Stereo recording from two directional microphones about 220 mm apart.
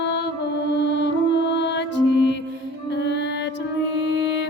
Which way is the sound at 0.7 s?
55° left (ahead or behind).